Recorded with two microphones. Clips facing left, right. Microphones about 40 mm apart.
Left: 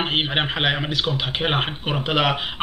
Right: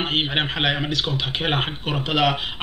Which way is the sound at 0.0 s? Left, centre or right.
Centre.